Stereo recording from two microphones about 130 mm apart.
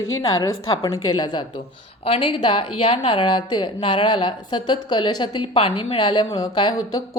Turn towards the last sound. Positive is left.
turn(degrees=30)  # may be behind; listen again after turning